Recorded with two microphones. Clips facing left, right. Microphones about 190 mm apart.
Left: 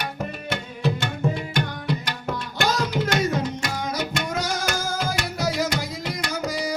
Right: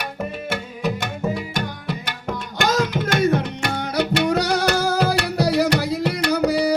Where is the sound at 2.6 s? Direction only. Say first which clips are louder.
Right 3 dB; 50° right (ahead or behind).